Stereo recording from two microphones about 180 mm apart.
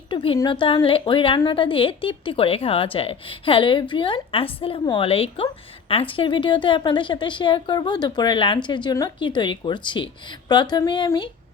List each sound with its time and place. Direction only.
0.1 s a woman's voice: 30° left (ahead or behind)